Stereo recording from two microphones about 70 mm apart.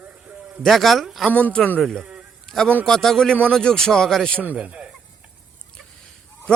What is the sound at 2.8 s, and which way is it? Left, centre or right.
Speech, centre.